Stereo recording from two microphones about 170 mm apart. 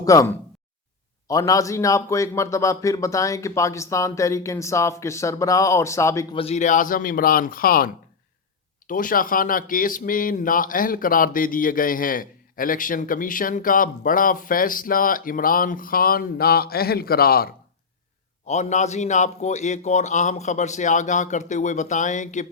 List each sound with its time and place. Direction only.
0.0 s a man's voice: 20° left (ahead or behind)
6.3 s speech: 35° left (ahead or behind); by 7.9 s 60° left (ahead or behind)
8.9 s speech: 55° left (ahead or behind)
18.4 s a man's voice: 45° left (ahead or behind)